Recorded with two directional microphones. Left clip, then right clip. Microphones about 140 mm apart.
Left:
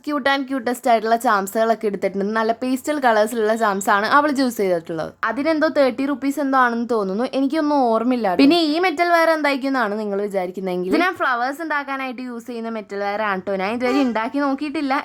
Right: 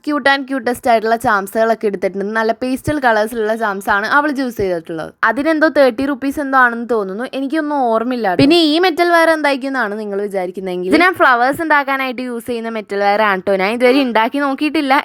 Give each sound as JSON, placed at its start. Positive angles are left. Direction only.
{"t": 0.1, "sound": "a woman's voice", "side_deg": -35}
{"t": 5.2, "sound": "a woman's voice", "side_deg": -35}
{"t": 8.4, "sound": "a woman's voice", "side_deg": -50}
{"t": 13.0, "sound": "a woman's voice", "side_deg": -35}